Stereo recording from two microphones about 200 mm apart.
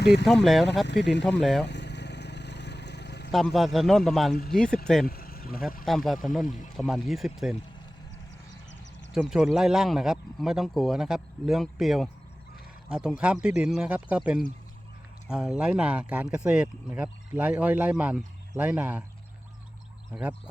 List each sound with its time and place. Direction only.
0.0 s speech: 55° left (ahead or behind)
0.4 s speech: centre (ahead or behind)
0.9 s speech: 60° left (ahead or behind)
1.2 s speech: centre (ahead or behind)
1.6 s vehicle: 60° left (ahead or behind)
3.3 s speech: centre (ahead or behind)
5.0 s speech: 50° left (ahead or behind)
5.8 s speech: centre (ahead or behind)
6.4 s speech: 40° left (ahead or behind)
6.7 s speech: centre (ahead or behind)
9.3 s speech: 5° right (ahead or behind)
20.1 s speech: 5° right (ahead or behind)